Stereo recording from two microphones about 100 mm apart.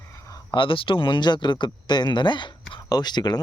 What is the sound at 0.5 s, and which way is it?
Speech, 60° left (ahead or behind).